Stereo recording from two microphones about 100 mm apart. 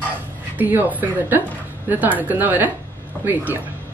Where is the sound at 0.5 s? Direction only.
15° right (ahead or behind).